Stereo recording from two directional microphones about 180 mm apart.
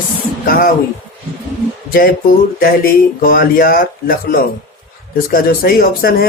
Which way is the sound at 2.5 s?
55° left (ahead or behind).